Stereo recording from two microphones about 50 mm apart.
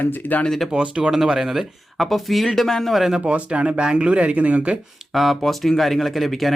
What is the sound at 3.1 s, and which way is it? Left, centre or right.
Speech, right.